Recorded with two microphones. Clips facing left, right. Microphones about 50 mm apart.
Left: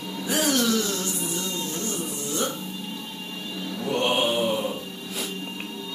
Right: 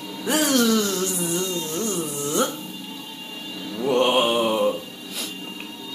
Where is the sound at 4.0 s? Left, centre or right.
Right.